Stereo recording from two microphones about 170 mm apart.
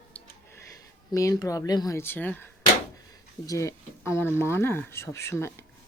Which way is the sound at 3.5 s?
15° left (ahead or behind).